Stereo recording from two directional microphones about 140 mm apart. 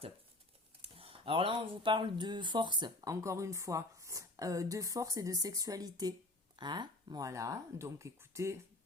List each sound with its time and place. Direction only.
0.8 s speech: 45° right (ahead or behind); by 8.5 s 20° right (ahead or behind)